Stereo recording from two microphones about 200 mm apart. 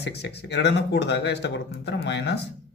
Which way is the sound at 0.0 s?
60° left (ahead or behind).